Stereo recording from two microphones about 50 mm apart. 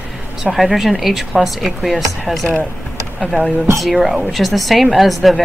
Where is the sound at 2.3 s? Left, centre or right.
Centre.